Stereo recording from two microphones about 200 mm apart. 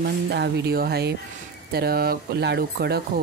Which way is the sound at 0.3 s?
55° right (ahead or behind).